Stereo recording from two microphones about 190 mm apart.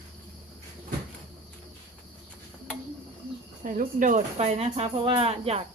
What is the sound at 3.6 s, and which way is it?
Speech, 45° right (ahead or behind).